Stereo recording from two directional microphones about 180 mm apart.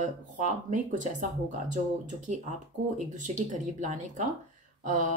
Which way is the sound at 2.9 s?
40° right (ahead or behind).